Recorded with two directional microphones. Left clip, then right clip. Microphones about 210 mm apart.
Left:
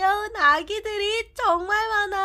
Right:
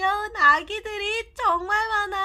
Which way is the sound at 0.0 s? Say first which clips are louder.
Even; 35° left (ahead or behind).